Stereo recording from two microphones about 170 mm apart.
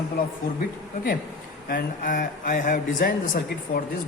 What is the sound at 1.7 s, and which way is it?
Speech, 55° left (ahead or behind).